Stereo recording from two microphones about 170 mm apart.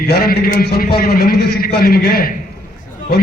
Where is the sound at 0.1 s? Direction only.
65° left (ahead or behind).